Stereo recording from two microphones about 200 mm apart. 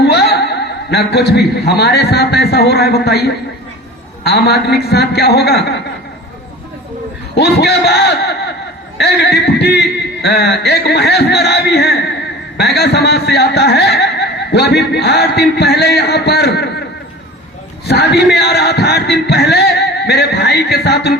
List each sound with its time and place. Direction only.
0.0 s a man's voice: 55° left (ahead or behind)
7.3 s a man's voice: 55° left (ahead or behind)
17.8 s speech: 55° left (ahead or behind)